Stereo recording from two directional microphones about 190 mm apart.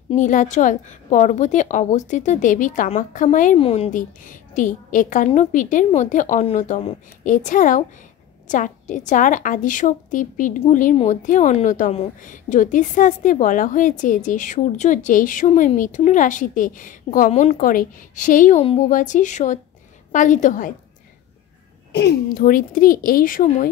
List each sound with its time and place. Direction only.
0.1 s a woman's voice: 40° left (ahead or behind)
3.5 s a woman's voice: 30° left (ahead or behind)
17.6 s a woman's voice: 45° left (ahead or behind)
18.6 s a woman's voice: 30° left (ahead or behind)
18.9 s a woman's voice: 40° left (ahead or behind)
21.9 s a woman's voice: 55° left (ahead or behind)